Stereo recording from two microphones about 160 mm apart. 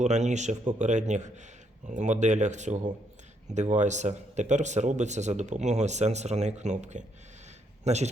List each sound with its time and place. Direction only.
0.0 s speech: 45° right (ahead or behind)